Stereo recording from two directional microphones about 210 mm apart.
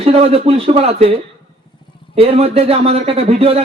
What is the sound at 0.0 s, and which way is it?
Speech, 30° right (ahead or behind).